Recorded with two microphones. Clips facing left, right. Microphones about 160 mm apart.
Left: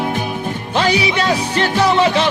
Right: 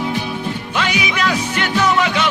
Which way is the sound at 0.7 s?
35° left (ahead or behind).